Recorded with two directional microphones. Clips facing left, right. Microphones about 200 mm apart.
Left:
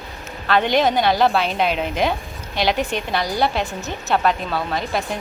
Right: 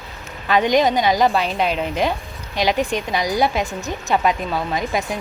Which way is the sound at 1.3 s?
Centre (ahead or behind).